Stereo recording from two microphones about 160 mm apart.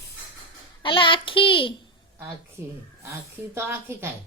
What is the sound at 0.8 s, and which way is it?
Speech, 30° left (ahead or behind).